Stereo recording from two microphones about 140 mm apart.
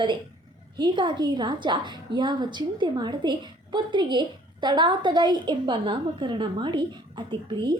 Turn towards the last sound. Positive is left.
turn(degrees=-35)  # may be behind; listen again after turning